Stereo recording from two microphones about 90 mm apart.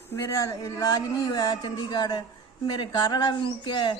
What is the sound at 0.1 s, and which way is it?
Speech, 35° left (ahead or behind).